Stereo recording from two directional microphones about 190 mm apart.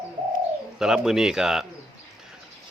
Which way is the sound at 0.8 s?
Centre (ahead or behind).